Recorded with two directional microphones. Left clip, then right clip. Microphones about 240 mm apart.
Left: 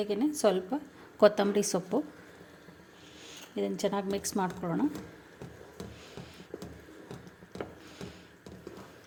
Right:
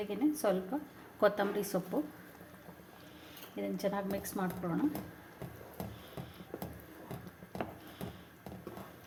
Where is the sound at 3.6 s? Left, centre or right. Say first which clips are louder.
Left 5 dB; left.